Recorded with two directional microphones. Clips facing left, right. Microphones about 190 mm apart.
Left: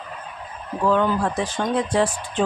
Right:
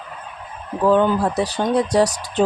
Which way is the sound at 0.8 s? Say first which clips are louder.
Right 4 dB; 35° right (ahead or behind).